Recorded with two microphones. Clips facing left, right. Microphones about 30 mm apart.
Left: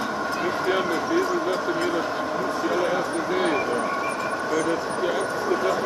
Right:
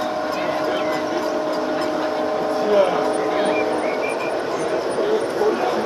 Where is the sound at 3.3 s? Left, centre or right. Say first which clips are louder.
Right 3 dB; centre.